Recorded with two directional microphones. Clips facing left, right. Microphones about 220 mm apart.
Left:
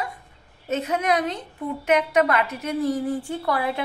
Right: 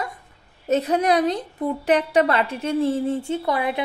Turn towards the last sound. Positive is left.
turn(degrees=-20)  # may be behind; listen again after turning